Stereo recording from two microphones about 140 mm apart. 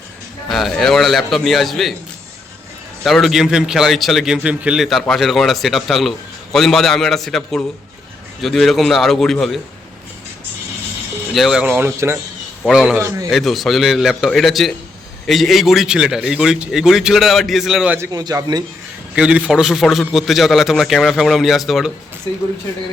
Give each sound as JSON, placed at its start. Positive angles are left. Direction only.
{"t": 0.4, "sound": "a man's voice", "side_deg": 0}
{"t": 3.0, "sound": "a man's voice", "side_deg": 0}
{"t": 11.3, "sound": "a man's voice", "side_deg": -5}
{"t": 11.9, "sound": "a man's voice", "side_deg": -20}
{"t": 12.6, "sound": "a man's voice", "side_deg": -5}
{"t": 17.9, "sound": "a man's voice", "side_deg": -25}
{"t": 19.1, "sound": "a man's voice", "side_deg": -5}